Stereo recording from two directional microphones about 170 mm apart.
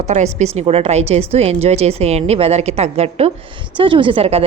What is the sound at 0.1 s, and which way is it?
A woman's voice, 45° right (ahead or behind).